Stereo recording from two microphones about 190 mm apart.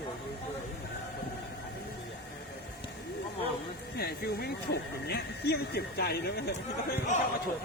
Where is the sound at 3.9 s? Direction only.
60° left (ahead or behind).